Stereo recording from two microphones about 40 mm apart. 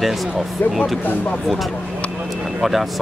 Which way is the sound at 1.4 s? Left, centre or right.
Centre.